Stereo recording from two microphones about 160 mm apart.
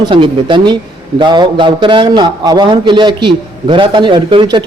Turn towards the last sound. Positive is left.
turn(degrees=-30)  # may be behind; listen again after turning